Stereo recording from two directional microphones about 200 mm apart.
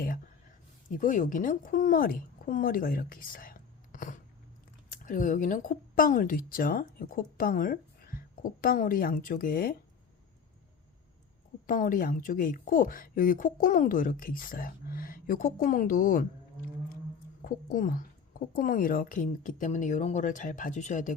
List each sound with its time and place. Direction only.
0.9 s a woman's voice: 40° left (ahead or behind)
11.6 s speech: 45° left (ahead or behind)
17.4 s speech: 40° left (ahead or behind)